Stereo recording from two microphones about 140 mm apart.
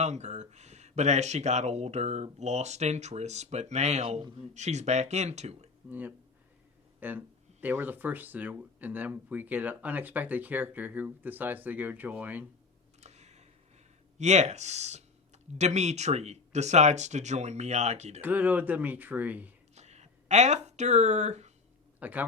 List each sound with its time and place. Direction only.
0.0 s speech: 55° right (ahead or behind)
5.9 s speech: 10° right (ahead or behind)
13.0 s a sound: 50° right (ahead or behind)
14.2 s speech: 55° right (ahead or behind)
18.2 s speech: 10° right (ahead or behind)
19.7 s a sound: 50° right (ahead or behind)
22.0 s speech: 10° right (ahead or behind)